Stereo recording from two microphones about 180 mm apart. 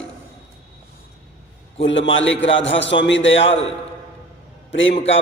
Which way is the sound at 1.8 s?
90° left.